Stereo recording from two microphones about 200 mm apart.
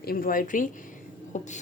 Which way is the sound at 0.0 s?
45° left (ahead or behind).